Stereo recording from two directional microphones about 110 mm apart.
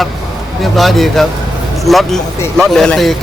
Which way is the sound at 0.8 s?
Centre (ahead or behind).